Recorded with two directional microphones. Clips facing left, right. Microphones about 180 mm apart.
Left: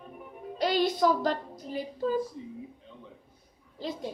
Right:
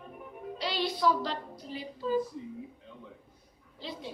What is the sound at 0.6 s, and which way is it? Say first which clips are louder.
A woman's voice: left 7 dB; 45° left (ahead or behind).